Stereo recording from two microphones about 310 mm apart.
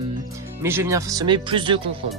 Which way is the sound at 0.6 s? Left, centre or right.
Centre.